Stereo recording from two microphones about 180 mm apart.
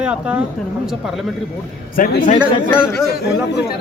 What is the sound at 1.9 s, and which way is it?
Speech, 55° left (ahead or behind).